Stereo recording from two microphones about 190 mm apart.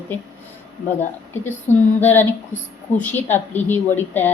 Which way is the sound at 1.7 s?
40° left (ahead or behind).